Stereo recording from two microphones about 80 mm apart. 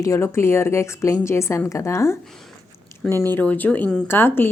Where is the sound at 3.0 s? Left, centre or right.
Left.